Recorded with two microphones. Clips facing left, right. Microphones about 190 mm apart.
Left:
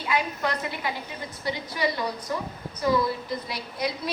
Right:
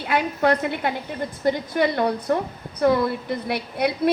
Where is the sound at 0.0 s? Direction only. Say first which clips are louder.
Right 6 dB; 60° right (ahead or behind).